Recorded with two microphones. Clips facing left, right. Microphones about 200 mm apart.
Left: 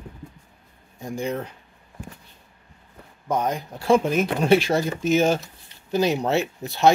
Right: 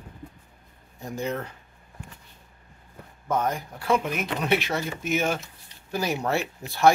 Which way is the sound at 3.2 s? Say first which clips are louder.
Left 2 dB; 15° left (ahead or behind).